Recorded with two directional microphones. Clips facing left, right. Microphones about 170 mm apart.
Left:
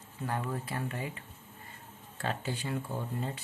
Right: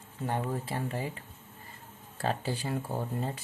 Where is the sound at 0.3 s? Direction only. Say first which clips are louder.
Right 3 dB; 30° right (ahead or behind).